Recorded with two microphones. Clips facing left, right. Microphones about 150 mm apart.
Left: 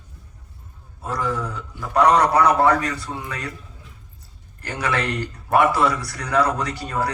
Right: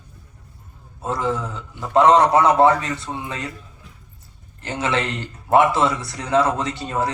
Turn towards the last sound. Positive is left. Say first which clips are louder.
# right 1 dB
turn(degrees=-25)  # may be behind; listen again after turning